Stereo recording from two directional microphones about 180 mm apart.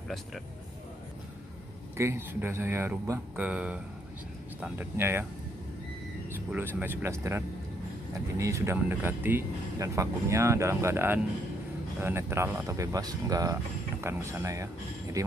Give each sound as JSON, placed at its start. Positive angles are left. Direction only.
{"t": 2.0, "sound": "speech", "side_deg": -15}
{"t": 6.8, "sound": "speech", "side_deg": -10}